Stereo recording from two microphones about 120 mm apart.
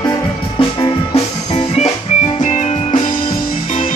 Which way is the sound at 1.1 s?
65° left (ahead or behind).